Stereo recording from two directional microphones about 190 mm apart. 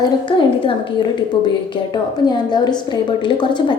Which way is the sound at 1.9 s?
25° left (ahead or behind).